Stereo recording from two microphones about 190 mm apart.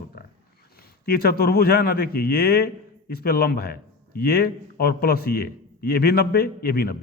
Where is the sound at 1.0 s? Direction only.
55° left (ahead or behind).